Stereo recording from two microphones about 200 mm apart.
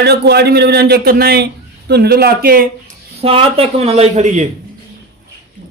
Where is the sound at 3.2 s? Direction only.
30° right (ahead or behind).